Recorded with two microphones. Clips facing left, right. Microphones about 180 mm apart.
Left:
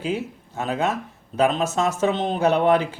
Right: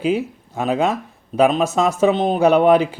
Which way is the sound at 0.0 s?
15° right (ahead or behind).